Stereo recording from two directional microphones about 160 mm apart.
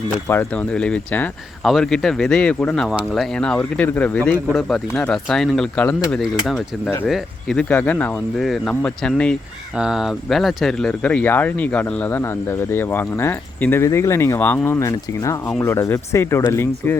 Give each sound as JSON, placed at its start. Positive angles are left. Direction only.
{"t": 0.3, "sound": "speech", "side_deg": 10}